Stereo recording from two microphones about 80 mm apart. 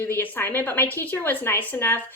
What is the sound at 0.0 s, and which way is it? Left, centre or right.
Speech, left.